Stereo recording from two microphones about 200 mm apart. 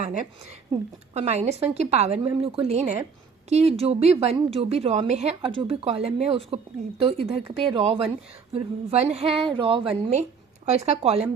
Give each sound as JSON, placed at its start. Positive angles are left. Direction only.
{"t": 0.0, "sound": "a woman's voice", "side_deg": -35}